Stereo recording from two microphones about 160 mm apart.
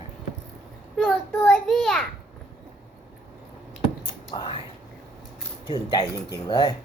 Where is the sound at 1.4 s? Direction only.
5° left (ahead or behind).